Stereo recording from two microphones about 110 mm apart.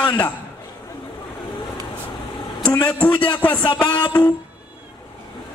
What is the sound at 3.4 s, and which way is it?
Speech, 15° left (ahead or behind).